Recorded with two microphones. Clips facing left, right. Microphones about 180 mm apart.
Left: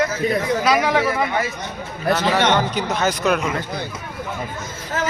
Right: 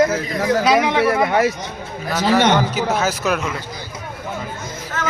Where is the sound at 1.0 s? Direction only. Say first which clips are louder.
Right 5 dB; 70° right (ahead or behind).